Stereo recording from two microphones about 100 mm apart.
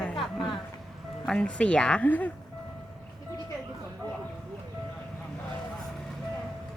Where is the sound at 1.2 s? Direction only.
10° left (ahead or behind).